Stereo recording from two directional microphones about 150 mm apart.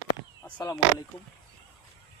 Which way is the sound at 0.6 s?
25° left (ahead or behind).